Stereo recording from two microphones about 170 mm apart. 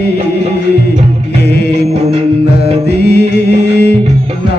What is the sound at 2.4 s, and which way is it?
Music, 75° left (ahead or behind).